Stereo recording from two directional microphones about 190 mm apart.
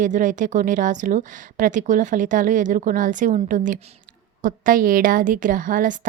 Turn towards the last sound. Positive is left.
turn(degrees=-45)  # may be behind; listen again after turning